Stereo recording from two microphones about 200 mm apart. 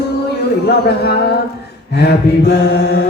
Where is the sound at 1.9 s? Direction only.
55° left (ahead or behind).